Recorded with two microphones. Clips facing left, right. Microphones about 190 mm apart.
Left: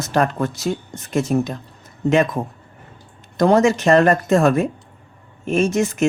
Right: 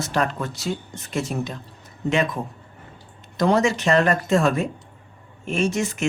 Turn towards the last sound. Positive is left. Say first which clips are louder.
# left 5 dB
turn(degrees=45)  # may be behind; listen again after turning